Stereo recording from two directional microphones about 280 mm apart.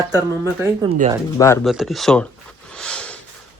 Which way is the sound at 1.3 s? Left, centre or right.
Centre.